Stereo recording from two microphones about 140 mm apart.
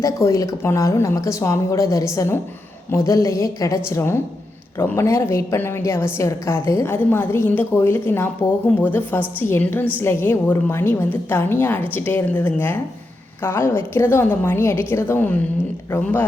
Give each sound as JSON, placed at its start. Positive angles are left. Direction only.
{"t": 0.0, "sound": "a woman's voice", "side_deg": 20}